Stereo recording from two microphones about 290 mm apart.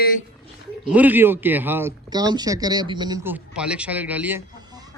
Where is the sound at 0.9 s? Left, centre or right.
Centre.